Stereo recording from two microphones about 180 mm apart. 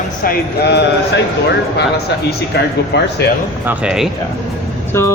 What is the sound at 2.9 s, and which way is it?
Speech, 70° left (ahead or behind).